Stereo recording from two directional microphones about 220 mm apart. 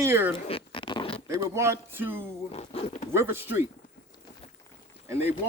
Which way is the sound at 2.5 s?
30° left (ahead or behind).